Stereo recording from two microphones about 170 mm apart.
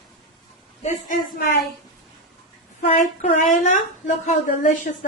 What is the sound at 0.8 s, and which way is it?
Speech, 55° left (ahead or behind).